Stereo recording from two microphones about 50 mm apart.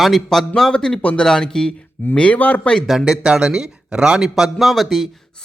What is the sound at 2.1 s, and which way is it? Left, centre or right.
Speech, left.